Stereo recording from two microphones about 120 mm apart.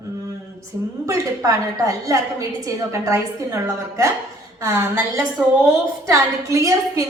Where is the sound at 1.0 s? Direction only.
25° right (ahead or behind).